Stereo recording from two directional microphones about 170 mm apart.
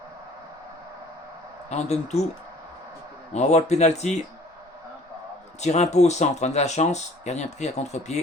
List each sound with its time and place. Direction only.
1.7 s speech: 40° left (ahead or behind)
3.3 s speech: 40° left (ahead or behind)
5.5 s speech: 40° left (ahead or behind)